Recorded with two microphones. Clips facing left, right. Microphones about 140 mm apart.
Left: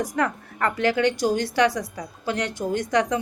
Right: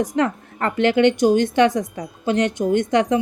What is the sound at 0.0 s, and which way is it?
Speech, 25° right (ahead or behind).